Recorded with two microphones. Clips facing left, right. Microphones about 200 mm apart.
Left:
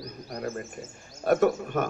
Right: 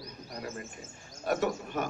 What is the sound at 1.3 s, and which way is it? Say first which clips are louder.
Speech: left 7 dB; 50° left (ahead or behind).